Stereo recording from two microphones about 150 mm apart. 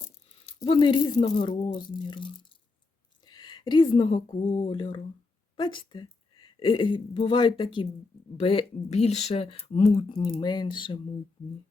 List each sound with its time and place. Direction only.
0.4 s speech: 35° left (ahead or behind)
3.2 s a sound: 30° left (ahead or behind)
4.4 s speech: 35° left (ahead or behind)